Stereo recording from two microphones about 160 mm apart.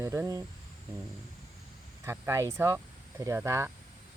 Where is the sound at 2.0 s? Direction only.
15° right (ahead or behind).